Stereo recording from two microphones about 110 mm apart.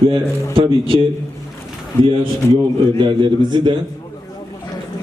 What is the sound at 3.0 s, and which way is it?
Speech, 50° right (ahead or behind).